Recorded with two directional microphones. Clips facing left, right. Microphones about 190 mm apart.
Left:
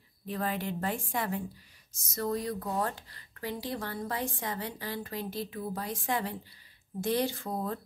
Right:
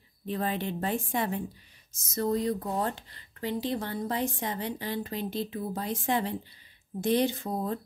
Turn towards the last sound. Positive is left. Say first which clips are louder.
# right 3 dB
turn(degrees=-20)  # may be behind; listen again after turning